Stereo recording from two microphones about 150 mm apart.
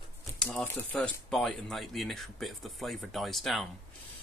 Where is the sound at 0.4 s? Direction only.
5° left (ahead or behind).